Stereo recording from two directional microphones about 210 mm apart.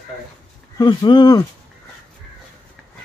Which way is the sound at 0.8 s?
20° left (ahead or behind).